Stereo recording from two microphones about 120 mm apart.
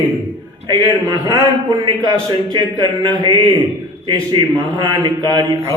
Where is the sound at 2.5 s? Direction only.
40° right (ahead or behind).